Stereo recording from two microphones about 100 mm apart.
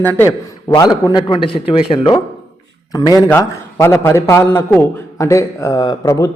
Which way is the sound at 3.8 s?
25° left (ahead or behind).